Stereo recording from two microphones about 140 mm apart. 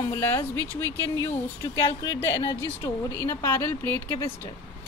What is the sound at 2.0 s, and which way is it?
A woman's voice, 25° left (ahead or behind).